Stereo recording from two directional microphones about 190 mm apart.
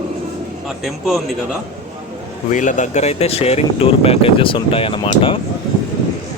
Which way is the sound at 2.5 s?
40° left (ahead or behind).